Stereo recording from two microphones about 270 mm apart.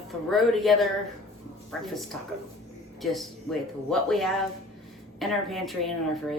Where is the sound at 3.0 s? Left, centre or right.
Centre.